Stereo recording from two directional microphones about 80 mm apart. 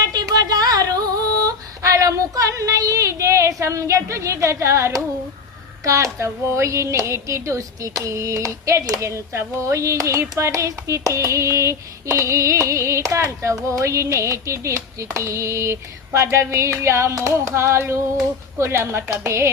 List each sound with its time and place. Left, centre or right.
0.0 s yodeling: right
5.8 s speech: right